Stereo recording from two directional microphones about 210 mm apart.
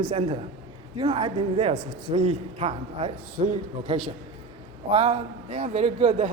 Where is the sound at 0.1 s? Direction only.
30° right (ahead or behind).